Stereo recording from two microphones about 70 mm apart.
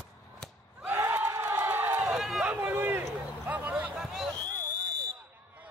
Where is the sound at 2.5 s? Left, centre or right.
Right.